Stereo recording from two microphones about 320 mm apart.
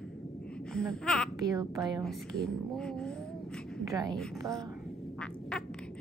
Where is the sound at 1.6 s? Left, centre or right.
Centre.